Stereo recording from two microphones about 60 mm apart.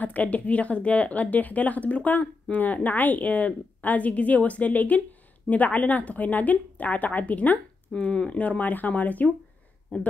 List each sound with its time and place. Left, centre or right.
0.0 s a woman's voice: left